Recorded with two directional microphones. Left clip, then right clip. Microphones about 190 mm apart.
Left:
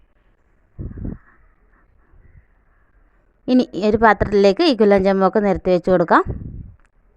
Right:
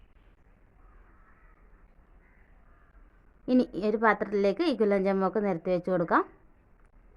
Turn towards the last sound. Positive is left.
turn(degrees=40)  # may be behind; listen again after turning